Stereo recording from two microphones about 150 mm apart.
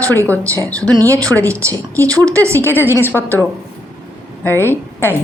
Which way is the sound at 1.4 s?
20° right (ahead or behind).